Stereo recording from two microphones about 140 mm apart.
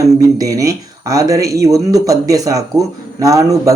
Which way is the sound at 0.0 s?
25° right (ahead or behind).